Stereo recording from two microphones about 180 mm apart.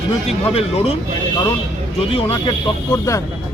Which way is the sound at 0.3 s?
35° left (ahead or behind).